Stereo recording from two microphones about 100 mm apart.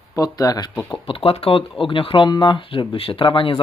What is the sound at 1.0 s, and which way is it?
Speech, 65° left (ahead or behind).